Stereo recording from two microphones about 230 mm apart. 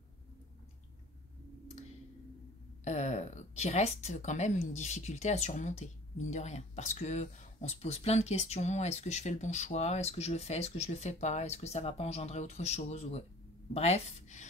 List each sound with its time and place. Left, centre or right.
2.8 s speech: left